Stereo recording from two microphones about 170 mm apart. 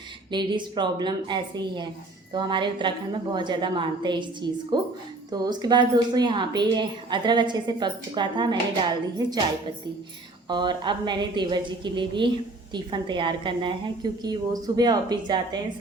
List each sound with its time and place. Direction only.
0.3 s a woman's voice: 25° right (ahead or behind)
10.5 s a woman's voice: 25° right (ahead or behind)